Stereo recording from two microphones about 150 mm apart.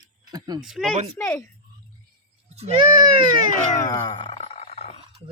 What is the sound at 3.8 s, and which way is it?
Grunt, 30° left (ahead or behind).